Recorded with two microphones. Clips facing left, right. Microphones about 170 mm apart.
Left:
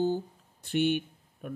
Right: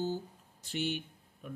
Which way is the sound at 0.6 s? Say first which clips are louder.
Left 9 dB; 60° left (ahead or behind).